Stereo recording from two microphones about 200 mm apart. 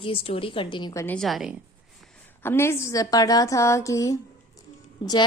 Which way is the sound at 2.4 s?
10° left (ahead or behind).